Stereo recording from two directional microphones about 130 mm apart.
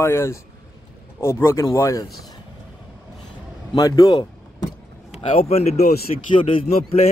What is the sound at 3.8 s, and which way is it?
Speech, 30° left (ahead or behind).